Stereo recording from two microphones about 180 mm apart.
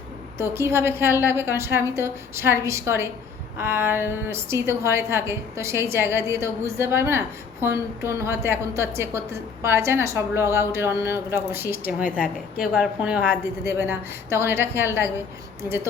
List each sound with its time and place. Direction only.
0.5 s a woman's voice: 15° right (ahead or behind)